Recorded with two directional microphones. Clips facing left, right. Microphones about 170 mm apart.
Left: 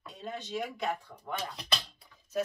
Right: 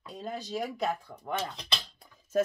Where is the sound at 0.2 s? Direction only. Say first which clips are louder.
Right 2 dB; 35° right (ahead or behind).